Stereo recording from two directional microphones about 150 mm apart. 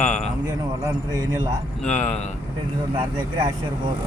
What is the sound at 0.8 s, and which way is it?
Speech, 25° right (ahead or behind).